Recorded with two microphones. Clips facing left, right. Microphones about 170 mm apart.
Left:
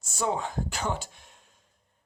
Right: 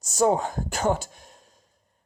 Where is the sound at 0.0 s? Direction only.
40° right (ahead or behind).